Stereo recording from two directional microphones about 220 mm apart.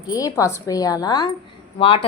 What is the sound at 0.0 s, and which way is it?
A woman's voice, 15° left (ahead or behind).